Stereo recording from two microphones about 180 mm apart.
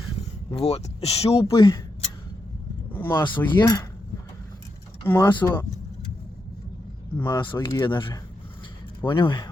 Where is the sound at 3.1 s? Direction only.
25° left (ahead or behind).